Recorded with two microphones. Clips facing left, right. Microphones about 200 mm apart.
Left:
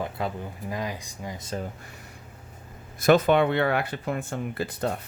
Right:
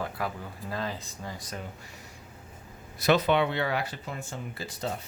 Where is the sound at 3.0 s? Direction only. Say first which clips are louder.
Left 5 dB; 50° left (ahead or behind).